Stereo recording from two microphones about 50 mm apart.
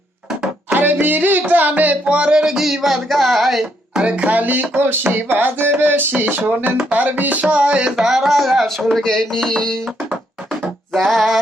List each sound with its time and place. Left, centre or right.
0.7 s music: right; by 2.6 s centre
2.6 s music: centre
3.9 s music: right
4.7 s a sound: right
6.9 s music: right; by 9.0 s centre
9.0 s music: centre
11.1 s music: centre